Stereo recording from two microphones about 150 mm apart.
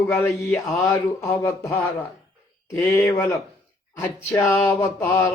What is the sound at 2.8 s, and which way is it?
Speech, 20° left (ahead or behind).